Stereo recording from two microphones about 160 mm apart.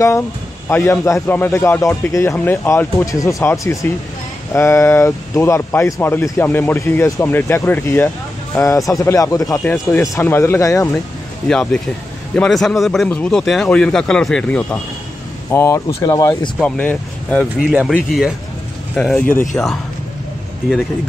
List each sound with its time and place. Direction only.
0.7 s speech: 15° left (ahead or behind)
11.4 s speech: 5° left (ahead or behind); by 16.3 s 20° left (ahead or behind)
16.5 s speech: 5° left (ahead or behind)
17.6 s speech: 5° right (ahead or behind)